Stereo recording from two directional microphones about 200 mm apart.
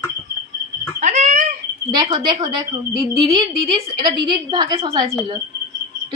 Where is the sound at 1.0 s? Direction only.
35° right (ahead or behind).